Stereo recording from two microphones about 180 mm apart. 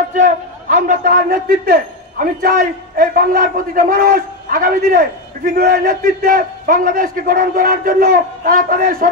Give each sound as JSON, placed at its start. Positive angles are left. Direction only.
{"t": 0.1, "sound": "a man's voice", "side_deg": -45}